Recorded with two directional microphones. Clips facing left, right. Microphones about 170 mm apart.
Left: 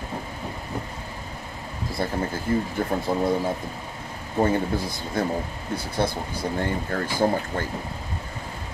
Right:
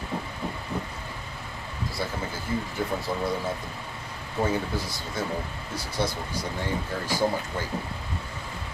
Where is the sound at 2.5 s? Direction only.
55° left (ahead or behind).